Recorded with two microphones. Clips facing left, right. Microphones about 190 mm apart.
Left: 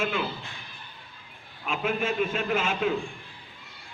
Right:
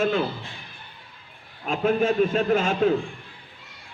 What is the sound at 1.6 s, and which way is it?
A man's voice, 40° right (ahead or behind).